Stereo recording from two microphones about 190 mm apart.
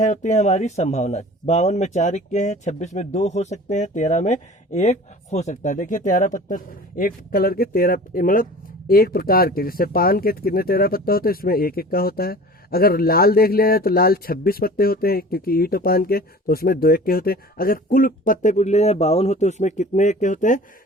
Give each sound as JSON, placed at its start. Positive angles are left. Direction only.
{"t": 0.0, "sound": "speech", "side_deg": 40}